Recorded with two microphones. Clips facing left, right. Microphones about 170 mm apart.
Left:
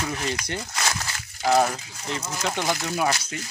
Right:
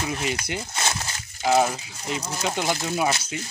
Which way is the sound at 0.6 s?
25° right (ahead or behind).